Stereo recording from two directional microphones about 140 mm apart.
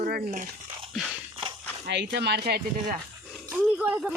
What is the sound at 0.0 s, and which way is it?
Speech, 65° right (ahead or behind).